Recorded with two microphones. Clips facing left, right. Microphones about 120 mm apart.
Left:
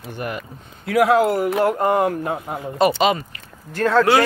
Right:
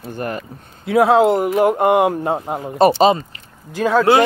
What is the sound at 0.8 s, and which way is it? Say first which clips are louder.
Speech: right 3 dB; 25° right (ahead or behind).